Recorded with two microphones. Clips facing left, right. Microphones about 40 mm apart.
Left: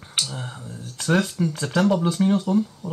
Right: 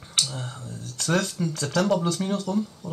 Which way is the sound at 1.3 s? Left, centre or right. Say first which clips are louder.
Left 3 dB; centre.